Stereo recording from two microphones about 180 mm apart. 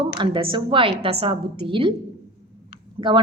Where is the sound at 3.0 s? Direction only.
25° right (ahead or behind).